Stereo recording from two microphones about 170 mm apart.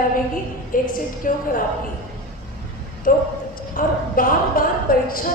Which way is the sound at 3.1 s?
55° left (ahead or behind).